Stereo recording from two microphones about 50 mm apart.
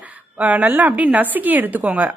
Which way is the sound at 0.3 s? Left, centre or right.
Right.